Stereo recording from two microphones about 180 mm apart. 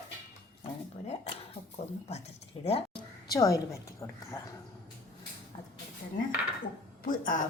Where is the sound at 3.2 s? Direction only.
20° left (ahead or behind).